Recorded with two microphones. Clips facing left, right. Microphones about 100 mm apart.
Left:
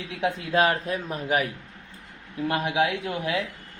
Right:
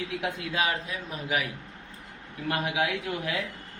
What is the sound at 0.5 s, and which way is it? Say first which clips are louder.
Speech: left 8 dB; 45° left (ahead or behind).